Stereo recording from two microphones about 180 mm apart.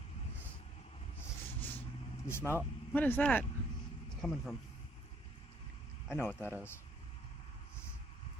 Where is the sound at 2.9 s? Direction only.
10° left (ahead or behind).